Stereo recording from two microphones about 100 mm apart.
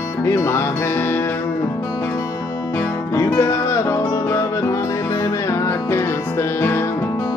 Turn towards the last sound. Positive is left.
turn(degrees=20)  # may be behind; listen again after turning